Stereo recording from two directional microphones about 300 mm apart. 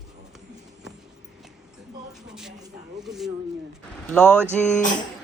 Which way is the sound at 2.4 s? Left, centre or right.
Centre.